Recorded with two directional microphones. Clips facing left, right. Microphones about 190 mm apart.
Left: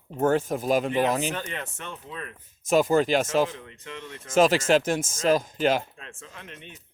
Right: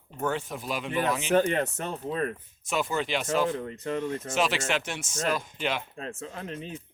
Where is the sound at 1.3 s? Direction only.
45° right (ahead or behind).